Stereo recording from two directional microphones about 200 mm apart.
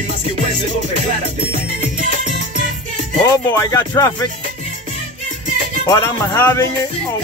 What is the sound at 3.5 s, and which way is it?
Music, 15° left (ahead or behind).